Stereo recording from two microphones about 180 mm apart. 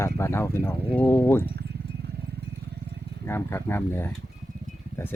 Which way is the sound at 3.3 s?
15° left (ahead or behind).